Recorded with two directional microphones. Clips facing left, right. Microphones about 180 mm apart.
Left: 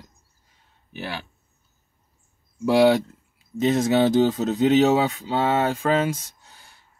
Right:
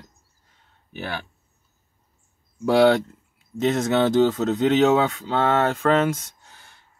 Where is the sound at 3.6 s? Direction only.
15° left (ahead or behind).